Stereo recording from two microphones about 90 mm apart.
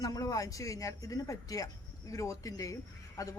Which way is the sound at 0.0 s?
45° left (ahead or behind).